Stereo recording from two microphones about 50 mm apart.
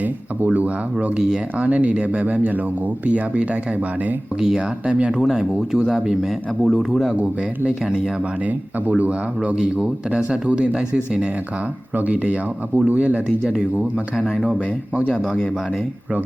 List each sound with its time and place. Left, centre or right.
0.0 s a sound: right
1.5 s speech: right
4.4 s speech: centre
5.2 s speech: centre
7.1 s speech: right
8.4 s speech: right
11.9 s speech: right
15.2 s a man's voice: centre